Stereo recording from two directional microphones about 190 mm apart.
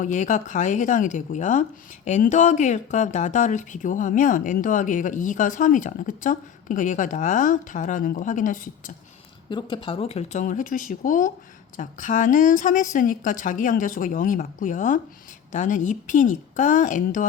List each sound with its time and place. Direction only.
0.0 s speech: 40° left (ahead or behind)
9.5 s speech: 25° left (ahead or behind); by 17.2 s 45° left (ahead or behind)